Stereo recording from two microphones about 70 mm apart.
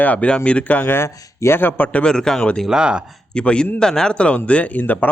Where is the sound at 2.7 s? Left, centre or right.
Centre.